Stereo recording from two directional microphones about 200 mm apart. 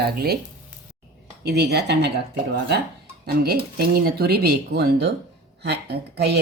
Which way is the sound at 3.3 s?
50° right (ahead or behind).